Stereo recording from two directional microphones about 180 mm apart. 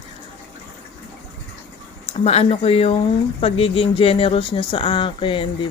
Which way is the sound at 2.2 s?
35° left (ahead or behind).